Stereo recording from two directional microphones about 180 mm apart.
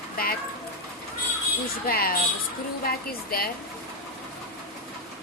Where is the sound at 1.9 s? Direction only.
55° left (ahead or behind).